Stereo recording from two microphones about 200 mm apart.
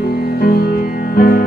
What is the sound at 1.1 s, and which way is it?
Music, 50° left (ahead or behind).